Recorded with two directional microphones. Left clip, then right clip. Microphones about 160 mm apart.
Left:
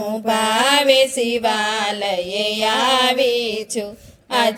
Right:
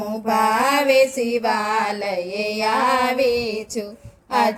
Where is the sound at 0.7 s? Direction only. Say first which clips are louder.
Left 4 dB; 60° left (ahead or behind).